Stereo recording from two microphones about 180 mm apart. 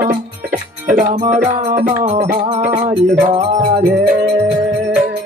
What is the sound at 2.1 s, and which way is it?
Music, 35° right (ahead or behind).